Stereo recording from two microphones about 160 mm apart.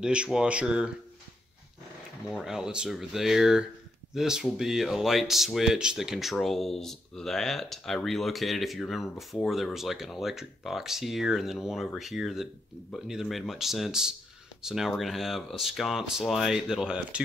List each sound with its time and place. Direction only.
0.0 s speech: 5° right (ahead or behind)
2.3 s speech: 5° right (ahead or behind)